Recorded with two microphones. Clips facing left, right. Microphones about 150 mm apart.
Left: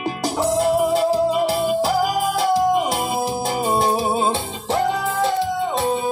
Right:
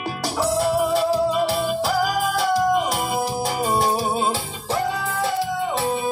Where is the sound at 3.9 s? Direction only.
25° left (ahead or behind).